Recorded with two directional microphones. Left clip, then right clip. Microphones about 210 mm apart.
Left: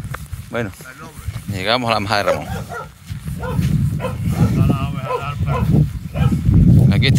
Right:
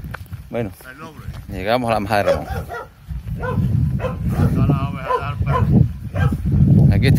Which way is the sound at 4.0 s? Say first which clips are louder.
Right 1 dB; 20° right (ahead or behind).